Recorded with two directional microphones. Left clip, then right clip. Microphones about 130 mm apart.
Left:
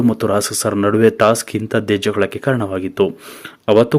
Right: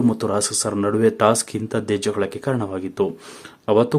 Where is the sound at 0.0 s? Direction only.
20° left (ahead or behind).